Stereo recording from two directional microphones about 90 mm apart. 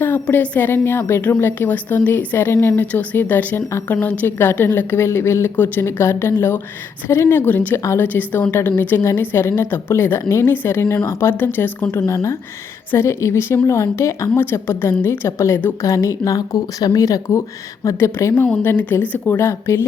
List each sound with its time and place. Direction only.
0.0 s a woman's voice: 25° left (ahead or behind)
3.8 s a woman's voice: 15° left (ahead or behind)
7.8 s a woman's voice: 30° left (ahead or behind)
8.0 s a woman's voice: 20° left (ahead or behind)